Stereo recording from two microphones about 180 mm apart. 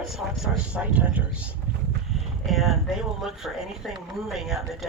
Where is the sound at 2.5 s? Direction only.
Centre (ahead or behind).